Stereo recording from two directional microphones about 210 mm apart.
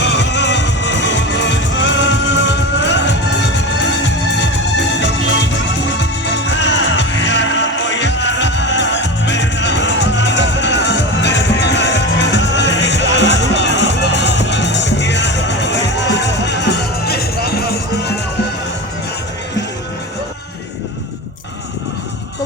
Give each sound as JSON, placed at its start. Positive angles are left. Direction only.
{"t": 0.0, "sound": "music", "side_deg": 55}